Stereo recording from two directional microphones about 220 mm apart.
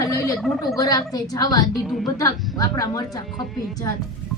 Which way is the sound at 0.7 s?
15° left (ahead or behind).